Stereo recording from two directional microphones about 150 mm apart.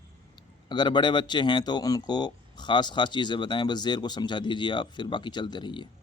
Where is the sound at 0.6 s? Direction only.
30° left (ahead or behind).